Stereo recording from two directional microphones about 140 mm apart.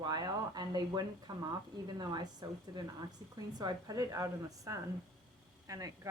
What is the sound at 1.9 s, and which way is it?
A woman's voice, 30° right (ahead or behind).